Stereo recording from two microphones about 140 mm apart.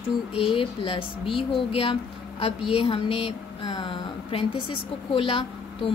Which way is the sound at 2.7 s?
45° left (ahead or behind).